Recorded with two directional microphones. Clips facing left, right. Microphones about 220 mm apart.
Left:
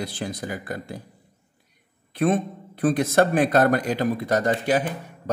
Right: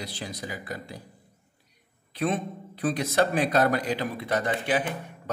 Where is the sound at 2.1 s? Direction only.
50° left (ahead or behind).